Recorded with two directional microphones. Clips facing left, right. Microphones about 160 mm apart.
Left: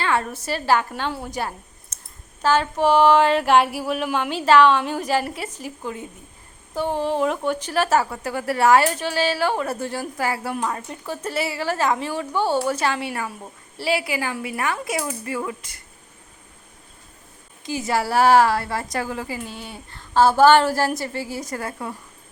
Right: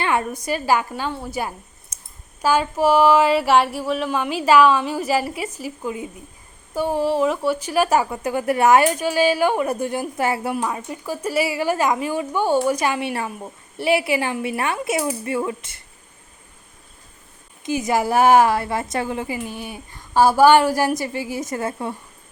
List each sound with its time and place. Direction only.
0.0 s a woman's voice: 15° right (ahead or behind)
1.3 s a sound: 10° right (ahead or behind)
2.4 s a woman's voice: 10° right (ahead or behind)
10.5 s a woman's voice: 10° right (ahead or behind); by 15.8 s 25° right (ahead or behind)
17.7 s a woman's voice: 20° right (ahead or behind)